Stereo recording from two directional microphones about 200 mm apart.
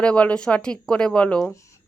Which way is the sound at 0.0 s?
5° left (ahead or behind).